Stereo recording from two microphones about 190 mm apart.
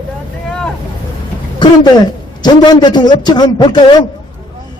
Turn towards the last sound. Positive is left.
turn(degrees=25)  # may be behind; listen again after turning